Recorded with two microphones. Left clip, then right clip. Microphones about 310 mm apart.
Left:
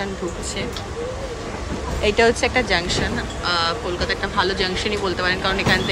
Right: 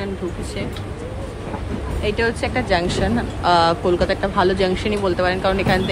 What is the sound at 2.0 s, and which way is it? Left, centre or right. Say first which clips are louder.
A woman's voice: left 4 dB; centre.